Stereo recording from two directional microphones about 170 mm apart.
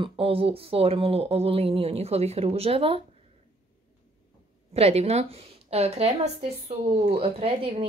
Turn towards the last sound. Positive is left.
turn(degrees=-35)  # may be behind; listen again after turning